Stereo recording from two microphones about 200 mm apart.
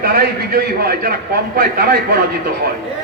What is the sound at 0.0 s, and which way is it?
A man's voice, 50° right (ahead or behind).